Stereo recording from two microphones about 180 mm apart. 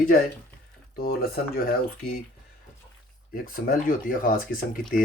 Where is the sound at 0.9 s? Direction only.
55° left (ahead or behind).